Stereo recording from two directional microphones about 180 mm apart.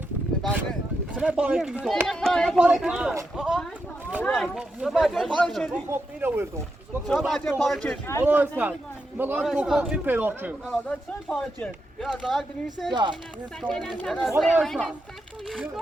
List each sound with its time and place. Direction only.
1.1 s speech: 5° right (ahead or behind)
5.9 s a man's voice: 10° right (ahead or behind)
7.1 s speech: centre (ahead or behind)
8.2 s a man's voice: 10° right (ahead or behind)
10.7 s speech: 5° left (ahead or behind)
12.9 s speech: 25° right (ahead or behind)
13.6 s speech: centre (ahead or behind)